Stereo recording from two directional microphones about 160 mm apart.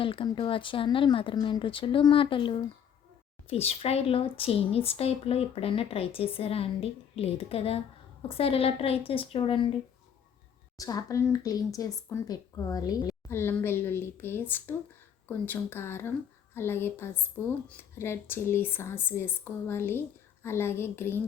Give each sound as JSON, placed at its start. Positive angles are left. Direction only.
{"t": 0.0, "sound": "speech", "side_deg": 35}
{"t": 10.8, "sound": "a woman's voice", "side_deg": 20}